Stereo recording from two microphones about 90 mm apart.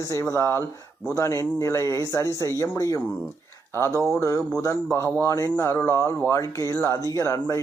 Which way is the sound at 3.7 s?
25° left (ahead or behind).